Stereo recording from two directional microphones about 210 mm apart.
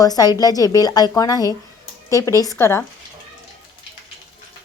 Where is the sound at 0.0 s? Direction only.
20° left (ahead or behind).